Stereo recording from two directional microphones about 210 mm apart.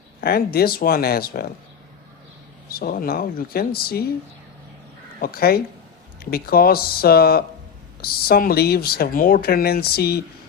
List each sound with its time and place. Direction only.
0.2 s speech: 45° left (ahead or behind)
2.6 s speech: 45° left (ahead or behind)
5.2 s speech: 45° left (ahead or behind)